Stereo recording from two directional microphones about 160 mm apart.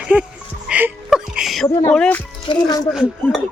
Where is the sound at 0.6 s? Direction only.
5° right (ahead or behind).